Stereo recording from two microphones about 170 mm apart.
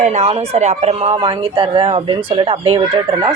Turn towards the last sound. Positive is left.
turn(degrees=-25)  # may be behind; listen again after turning